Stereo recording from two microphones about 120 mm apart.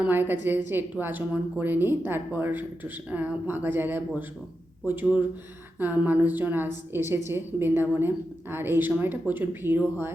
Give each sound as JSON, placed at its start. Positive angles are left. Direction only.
{"t": 0.0, "sound": "a woman's voice", "side_deg": -15}